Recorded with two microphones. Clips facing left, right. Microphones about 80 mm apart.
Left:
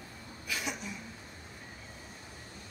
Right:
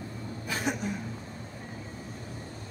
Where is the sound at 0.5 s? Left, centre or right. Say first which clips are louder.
Right 7 dB; right.